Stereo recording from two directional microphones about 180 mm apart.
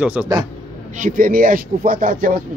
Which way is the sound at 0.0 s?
5° right (ahead or behind).